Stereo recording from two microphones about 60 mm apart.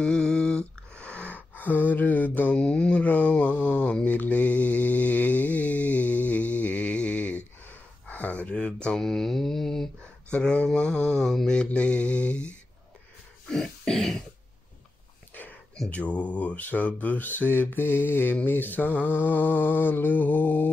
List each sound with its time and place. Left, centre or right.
0.0 s a sound: centre; by 2.5 s left
2.5 s a sound: centre
9.0 s mantra: centre
10.3 s speech: centre
11.5 s mantra: centre
13.5 s throat clearing: centre
15.9 s speech: left